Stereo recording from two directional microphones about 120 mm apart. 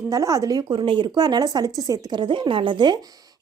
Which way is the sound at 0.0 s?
30° right (ahead or behind).